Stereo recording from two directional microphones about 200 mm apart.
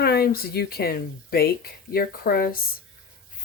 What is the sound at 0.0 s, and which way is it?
Speech, 50° left (ahead or behind).